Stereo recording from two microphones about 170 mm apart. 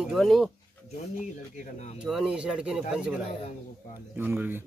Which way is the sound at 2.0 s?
5° right (ahead or behind).